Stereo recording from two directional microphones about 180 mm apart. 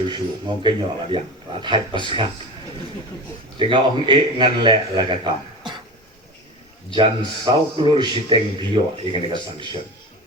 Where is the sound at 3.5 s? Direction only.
25° right (ahead or behind).